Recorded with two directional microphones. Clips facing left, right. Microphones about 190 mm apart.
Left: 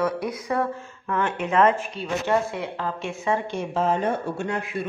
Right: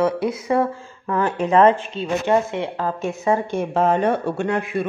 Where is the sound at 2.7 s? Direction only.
40° right (ahead or behind); by 4.9 s 60° right (ahead or behind).